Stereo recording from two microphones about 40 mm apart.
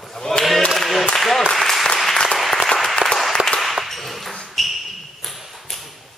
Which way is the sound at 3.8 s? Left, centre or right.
Centre.